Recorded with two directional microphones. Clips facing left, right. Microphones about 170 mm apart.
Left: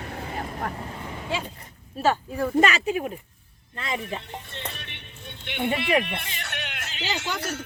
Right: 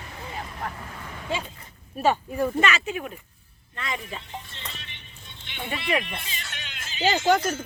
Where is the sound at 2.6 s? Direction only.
40° left (ahead or behind).